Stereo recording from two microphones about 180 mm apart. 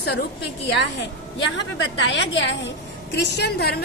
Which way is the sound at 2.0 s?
90° left.